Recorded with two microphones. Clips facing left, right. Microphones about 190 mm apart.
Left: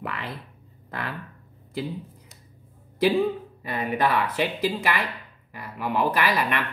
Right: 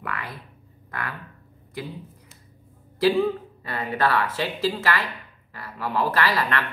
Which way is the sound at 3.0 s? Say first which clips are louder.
Right 1 dB; 20° left (ahead or behind).